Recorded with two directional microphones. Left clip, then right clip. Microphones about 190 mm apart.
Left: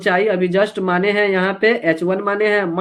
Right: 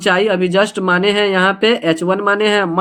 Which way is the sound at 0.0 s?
40° right (ahead or behind).